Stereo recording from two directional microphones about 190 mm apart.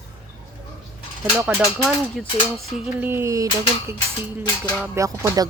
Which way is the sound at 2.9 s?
10° right (ahead or behind).